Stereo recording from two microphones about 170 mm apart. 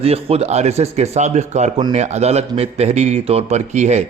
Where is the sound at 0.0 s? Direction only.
35° right (ahead or behind).